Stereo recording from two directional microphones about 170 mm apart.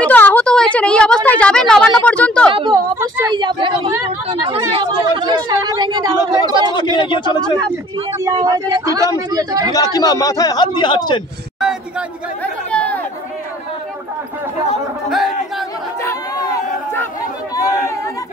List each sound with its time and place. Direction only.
0.0 s a woman's voice: 10° left (ahead or behind)
2.5 s speech: 25° right (ahead or behind)
7.0 s a man's voice: 25° left (ahead or behind)
8.2 s speech: 20° right (ahead or behind)
9.8 s a man's voice: 20° left (ahead or behind)
12.7 s chatter: 10° left (ahead or behind)
15.0 s speech: centre (ahead or behind)
16.0 s chatter: 15° left (ahead or behind)